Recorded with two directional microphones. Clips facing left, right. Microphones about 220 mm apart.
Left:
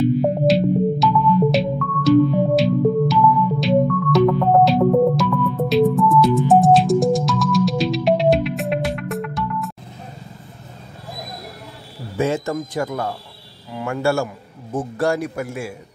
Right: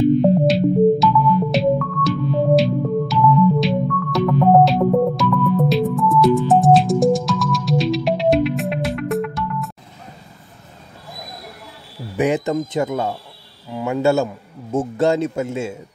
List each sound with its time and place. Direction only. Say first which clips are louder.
0.2 s music: right 2 dB; centre (ahead or behind)
12.2 s a man's voice: right 2 dB; 15° right (ahead or behind)